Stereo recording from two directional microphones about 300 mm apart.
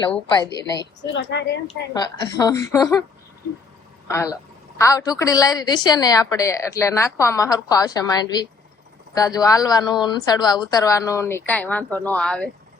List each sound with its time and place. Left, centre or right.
0.0 s a woman's voice: centre
1.1 s a woman's voice: left
1.6 s a woman's voice: centre
4.1 s a woman's voice: centre